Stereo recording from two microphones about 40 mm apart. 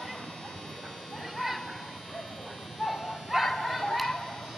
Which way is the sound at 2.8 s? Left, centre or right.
Centre.